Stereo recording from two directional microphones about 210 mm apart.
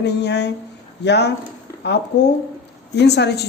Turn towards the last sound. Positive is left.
turn(degrees=55)  # may be behind; listen again after turning